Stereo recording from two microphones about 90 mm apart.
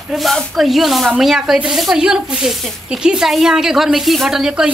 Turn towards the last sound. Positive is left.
turn(degrees=-5)  # may be behind; listen again after turning